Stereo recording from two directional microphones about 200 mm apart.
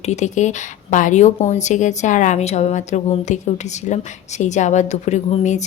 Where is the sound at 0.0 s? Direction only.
35° left (ahead or behind).